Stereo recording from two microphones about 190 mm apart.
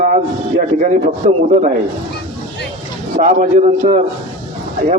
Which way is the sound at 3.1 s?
45° right (ahead or behind).